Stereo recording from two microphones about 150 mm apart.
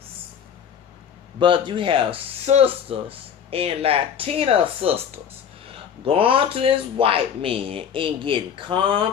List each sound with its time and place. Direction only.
1.4 s speech: 35° right (ahead or behind)